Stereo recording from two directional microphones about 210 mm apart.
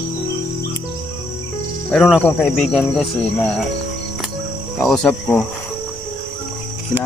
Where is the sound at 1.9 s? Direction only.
5° left (ahead or behind).